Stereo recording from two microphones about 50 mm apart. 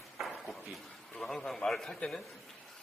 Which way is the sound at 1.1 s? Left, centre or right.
Centre.